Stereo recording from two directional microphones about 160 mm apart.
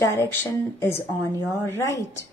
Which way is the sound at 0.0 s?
15° left (ahead or behind).